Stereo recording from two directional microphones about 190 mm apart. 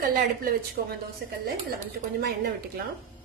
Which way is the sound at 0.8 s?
55° right (ahead or behind).